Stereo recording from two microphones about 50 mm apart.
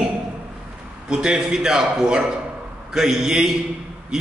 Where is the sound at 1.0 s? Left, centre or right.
Centre.